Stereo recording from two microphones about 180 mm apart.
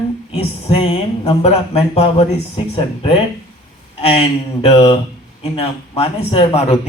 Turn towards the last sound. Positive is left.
turn(degrees=35)  # may be behind; listen again after turning